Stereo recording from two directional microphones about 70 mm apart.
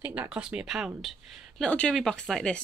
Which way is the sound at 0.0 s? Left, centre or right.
Right.